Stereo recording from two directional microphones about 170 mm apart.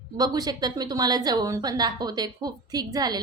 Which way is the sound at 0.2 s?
25° right (ahead or behind).